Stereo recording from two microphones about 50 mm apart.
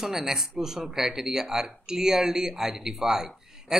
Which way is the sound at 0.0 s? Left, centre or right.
Centre.